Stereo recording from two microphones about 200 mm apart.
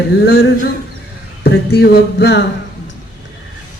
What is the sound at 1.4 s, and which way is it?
Speech, 55° left (ahead or behind).